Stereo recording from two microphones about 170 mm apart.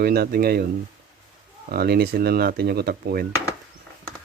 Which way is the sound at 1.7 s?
65° right (ahead or behind).